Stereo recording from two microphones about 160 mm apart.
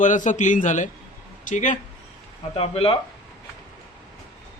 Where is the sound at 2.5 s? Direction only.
40° left (ahead or behind).